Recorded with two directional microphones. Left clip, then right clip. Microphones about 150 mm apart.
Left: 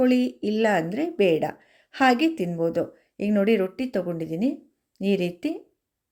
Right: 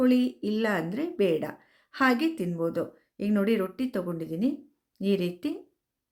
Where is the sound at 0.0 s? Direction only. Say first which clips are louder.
Left 3 dB; 20° left (ahead or behind).